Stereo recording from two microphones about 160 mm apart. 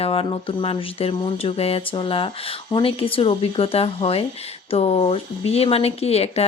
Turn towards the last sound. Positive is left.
turn(degrees=40)  # may be behind; listen again after turning